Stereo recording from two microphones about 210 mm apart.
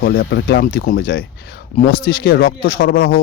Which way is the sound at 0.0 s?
45° left (ahead or behind).